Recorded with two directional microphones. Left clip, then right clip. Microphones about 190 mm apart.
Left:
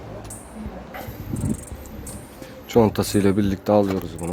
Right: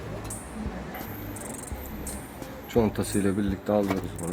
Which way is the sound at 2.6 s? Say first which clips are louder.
Left 7 dB; 55° left (ahead or behind).